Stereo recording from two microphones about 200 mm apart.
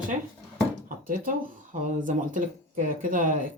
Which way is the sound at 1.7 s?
40° right (ahead or behind).